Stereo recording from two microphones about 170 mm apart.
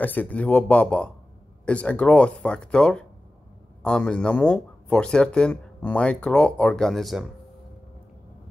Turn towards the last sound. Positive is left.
turn(degrees=0)  # may be behind; listen again after turning